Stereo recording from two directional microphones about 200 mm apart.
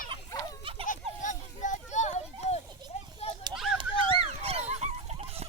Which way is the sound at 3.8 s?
30° right (ahead or behind).